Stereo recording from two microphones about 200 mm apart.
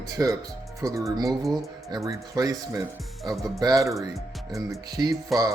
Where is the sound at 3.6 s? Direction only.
15° right (ahead or behind).